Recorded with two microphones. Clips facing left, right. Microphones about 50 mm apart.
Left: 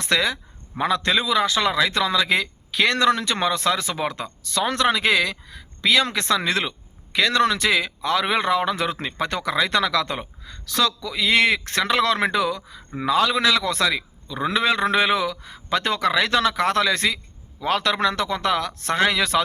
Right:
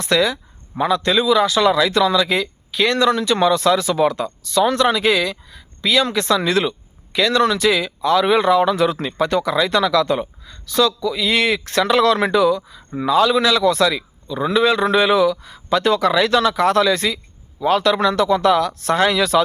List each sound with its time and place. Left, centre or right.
0.0 s speech: left
4.4 s speech: left